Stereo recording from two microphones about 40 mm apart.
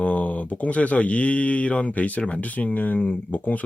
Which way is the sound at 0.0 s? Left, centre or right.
Left.